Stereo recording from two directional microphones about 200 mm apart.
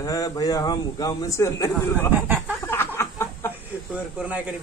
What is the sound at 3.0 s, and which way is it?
Chicken, 15° left (ahead or behind).